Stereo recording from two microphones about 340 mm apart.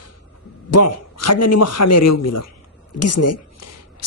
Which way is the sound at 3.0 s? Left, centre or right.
Left.